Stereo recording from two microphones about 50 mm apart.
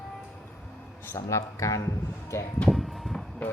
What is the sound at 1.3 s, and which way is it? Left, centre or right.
Speech, left.